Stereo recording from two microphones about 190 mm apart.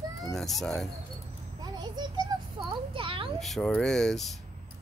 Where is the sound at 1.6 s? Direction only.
20° right (ahead or behind).